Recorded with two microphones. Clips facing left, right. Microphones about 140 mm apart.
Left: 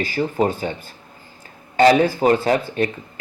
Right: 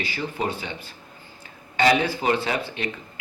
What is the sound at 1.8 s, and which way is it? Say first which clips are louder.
Speech: left 7 dB; 45° left (ahead or behind).